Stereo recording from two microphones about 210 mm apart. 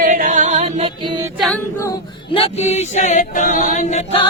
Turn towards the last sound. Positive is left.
turn(degrees=35)  # may be behind; listen again after turning